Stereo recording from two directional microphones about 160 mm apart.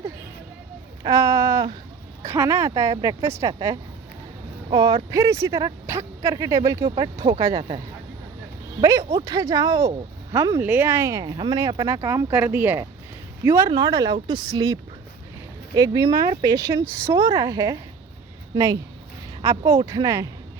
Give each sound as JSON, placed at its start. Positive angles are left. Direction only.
{"t": 1.0, "sound": "speech", "side_deg": -20}
{"t": 8.8, "sound": "speech", "side_deg": -20}
{"t": 13.7, "sound": "speech", "side_deg": -30}